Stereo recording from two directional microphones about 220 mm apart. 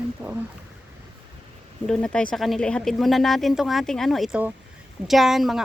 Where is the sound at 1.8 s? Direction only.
5° left (ahead or behind).